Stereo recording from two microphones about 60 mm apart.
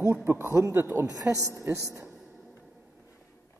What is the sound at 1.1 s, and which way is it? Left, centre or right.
Speech, right.